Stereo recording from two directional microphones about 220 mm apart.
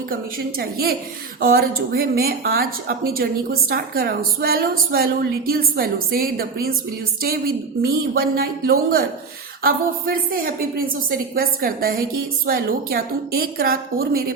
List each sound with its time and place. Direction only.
0.1 s a woman's voice: 45° right (ahead or behind)